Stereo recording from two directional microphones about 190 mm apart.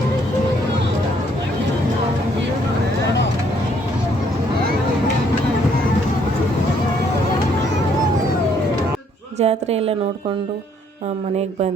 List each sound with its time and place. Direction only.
9.4 s a woman's voice: 35° right (ahead or behind)